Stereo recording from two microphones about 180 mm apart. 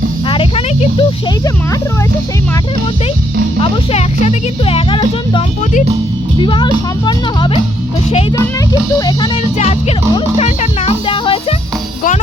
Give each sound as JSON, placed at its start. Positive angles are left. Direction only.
{"t": 0.3, "sound": "a sound", "side_deg": 30}
{"t": 3.6, "sound": "speech", "side_deg": 35}
{"t": 6.4, "sound": "speech", "side_deg": 25}
{"t": 9.0, "sound": "speech", "side_deg": 25}
{"t": 10.2, "sound": "speech", "side_deg": 35}